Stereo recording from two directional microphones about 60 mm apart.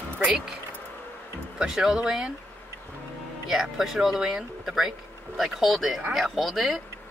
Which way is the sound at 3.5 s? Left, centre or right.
Centre.